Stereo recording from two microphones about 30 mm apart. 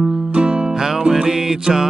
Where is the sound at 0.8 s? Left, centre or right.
Centre.